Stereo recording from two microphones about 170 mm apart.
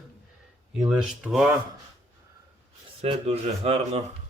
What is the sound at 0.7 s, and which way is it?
Speech, 5° right (ahead or behind).